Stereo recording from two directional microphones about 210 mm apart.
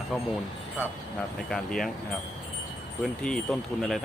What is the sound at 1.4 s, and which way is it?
Speech, centre (ahead or behind).